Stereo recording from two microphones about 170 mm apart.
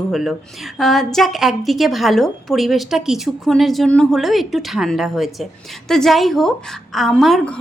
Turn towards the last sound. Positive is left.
turn(degrees=5)  # may be behind; listen again after turning